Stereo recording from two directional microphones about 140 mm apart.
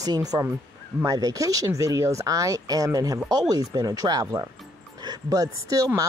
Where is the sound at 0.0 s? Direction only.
25° right (ahead or behind).